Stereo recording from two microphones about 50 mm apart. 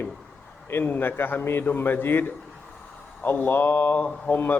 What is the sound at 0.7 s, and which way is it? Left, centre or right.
A man's voice, left.